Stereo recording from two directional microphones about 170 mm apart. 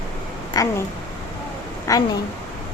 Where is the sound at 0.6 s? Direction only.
20° left (ahead or behind).